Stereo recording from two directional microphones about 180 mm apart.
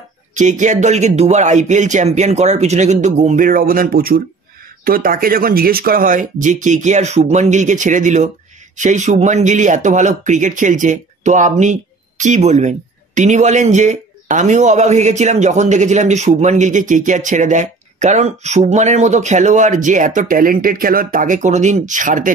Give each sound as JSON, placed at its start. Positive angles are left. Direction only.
{"t": 0.3, "sound": "speech", "side_deg": -40}